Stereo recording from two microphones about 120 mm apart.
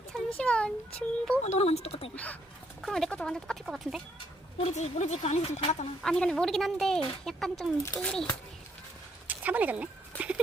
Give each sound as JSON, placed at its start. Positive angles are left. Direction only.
{"t": 0.1, "sound": "a sound", "side_deg": 5}
{"t": 1.4, "sound": "a woman's voice", "side_deg": 65}
{"t": 2.1, "sound": "a child's voice", "side_deg": 10}
{"t": 4.5, "sound": "a woman's voice", "side_deg": 65}
{"t": 6.0, "sound": "a child's voice", "side_deg": 5}
{"t": 9.2, "sound": "a sound", "side_deg": -15}